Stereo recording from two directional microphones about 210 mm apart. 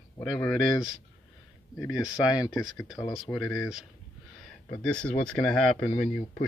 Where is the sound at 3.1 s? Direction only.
Centre (ahead or behind).